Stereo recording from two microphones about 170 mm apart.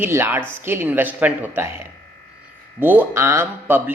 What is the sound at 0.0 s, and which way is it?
A woman's voice, 15° right (ahead or behind).